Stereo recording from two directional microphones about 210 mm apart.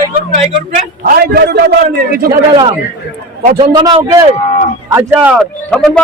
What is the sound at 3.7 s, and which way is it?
Speech, 20° right (ahead or behind).